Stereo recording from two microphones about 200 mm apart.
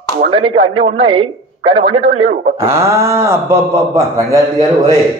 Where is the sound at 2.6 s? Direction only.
15° right (ahead or behind).